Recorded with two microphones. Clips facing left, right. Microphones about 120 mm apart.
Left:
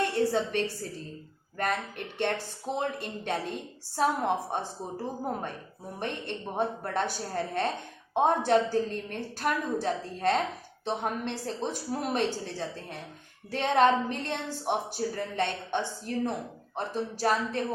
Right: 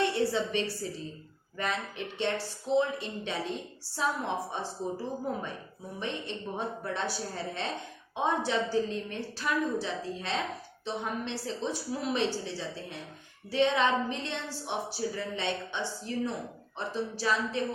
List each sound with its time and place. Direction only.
0.0 s a woman's voice: 45° left (ahead or behind)